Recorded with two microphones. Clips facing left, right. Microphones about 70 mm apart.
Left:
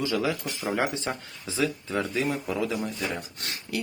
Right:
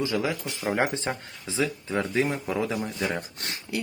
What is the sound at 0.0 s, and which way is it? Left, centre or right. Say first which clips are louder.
Speech: even; right.